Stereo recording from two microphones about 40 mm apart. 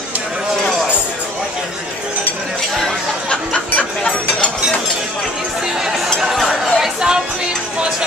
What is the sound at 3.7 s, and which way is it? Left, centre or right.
Music, left.